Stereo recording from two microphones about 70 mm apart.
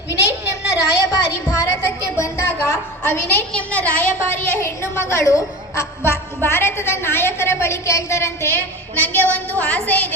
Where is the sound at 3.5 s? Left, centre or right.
Centre.